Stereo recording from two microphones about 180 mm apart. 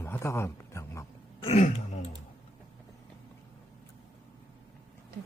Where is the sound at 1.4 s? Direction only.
35° left (ahead or behind).